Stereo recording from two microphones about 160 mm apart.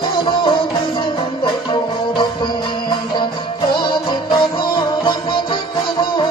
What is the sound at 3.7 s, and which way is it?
Music, 30° left (ahead or behind).